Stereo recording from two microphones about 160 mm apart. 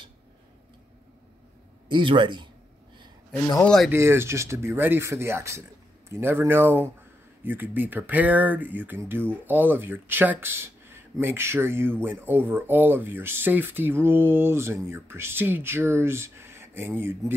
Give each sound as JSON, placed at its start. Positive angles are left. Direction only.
{"t": 1.9, "sound": "speech", "side_deg": -30}
{"t": 3.6, "sound": "speech", "side_deg": 5}
{"t": 3.9, "sound": "speech", "side_deg": -15}